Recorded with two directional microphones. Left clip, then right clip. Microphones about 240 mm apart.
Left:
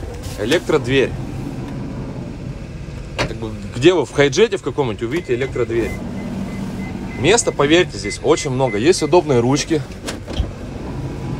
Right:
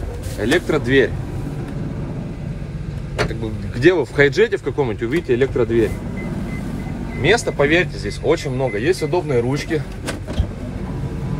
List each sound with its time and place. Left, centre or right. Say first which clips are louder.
0.4 s speech: left 1 dB; centre
3.8 s speech: left 1 dB; centre
7.2 s speech: left 1 dB; centre